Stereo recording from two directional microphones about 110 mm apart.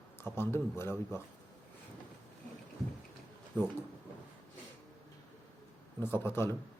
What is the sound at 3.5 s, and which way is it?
Speech, 20° left (ahead or behind).